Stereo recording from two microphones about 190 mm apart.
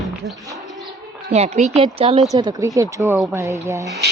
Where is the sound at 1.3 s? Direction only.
35° right (ahead or behind).